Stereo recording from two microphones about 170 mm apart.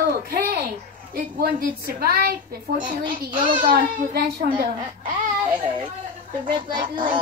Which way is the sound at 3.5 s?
55° right (ahead or behind).